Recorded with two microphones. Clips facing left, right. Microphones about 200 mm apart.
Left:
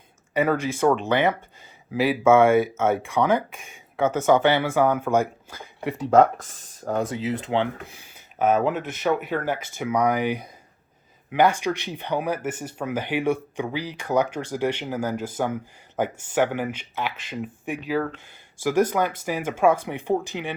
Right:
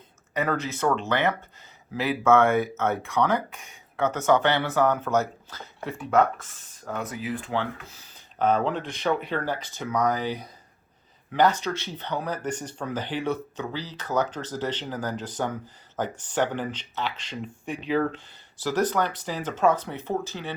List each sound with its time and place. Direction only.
0.3 s speech: 10° left (ahead or behind)
6.1 s speech: 35° left (ahead or behind)
7.1 s speech: 25° left (ahead or behind)